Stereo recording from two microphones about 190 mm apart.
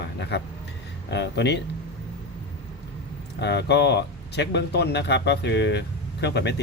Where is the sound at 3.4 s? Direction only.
65° left (ahead or behind).